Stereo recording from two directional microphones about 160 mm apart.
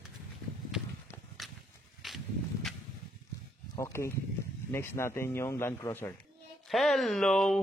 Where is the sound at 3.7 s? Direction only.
15° left (ahead or behind).